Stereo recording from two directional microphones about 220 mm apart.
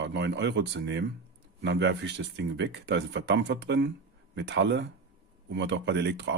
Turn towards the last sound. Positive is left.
turn(degrees=-50)  # may be behind; listen again after turning